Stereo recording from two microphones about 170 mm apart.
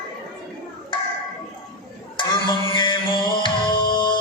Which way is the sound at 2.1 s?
30° left (ahead or behind).